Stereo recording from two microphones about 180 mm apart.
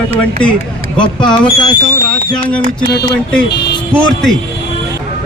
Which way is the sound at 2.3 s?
5° left (ahead or behind).